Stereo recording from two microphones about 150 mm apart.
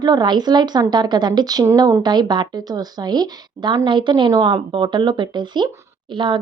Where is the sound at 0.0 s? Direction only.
25° right (ahead or behind).